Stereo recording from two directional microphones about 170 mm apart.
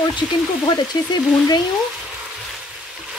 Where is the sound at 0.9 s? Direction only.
25° left (ahead or behind).